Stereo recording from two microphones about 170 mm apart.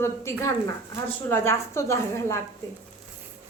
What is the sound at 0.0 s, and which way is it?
A woman's voice, 15° left (ahead or behind).